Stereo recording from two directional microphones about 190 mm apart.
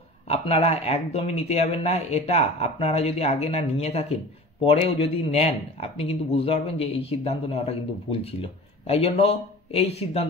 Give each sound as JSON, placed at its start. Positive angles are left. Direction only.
{"t": 0.3, "sound": "speech", "side_deg": 30}